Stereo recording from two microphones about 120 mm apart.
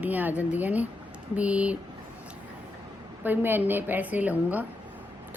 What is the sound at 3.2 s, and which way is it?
A woman's voice, 15° right (ahead or behind).